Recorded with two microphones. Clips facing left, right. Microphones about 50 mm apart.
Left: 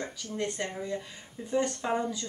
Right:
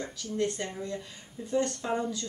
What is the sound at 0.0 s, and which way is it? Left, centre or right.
Speech, centre.